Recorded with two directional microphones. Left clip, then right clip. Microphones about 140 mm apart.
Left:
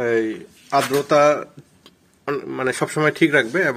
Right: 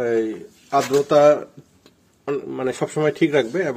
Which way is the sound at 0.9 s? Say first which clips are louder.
Right 2 dB; 20° right (ahead or behind).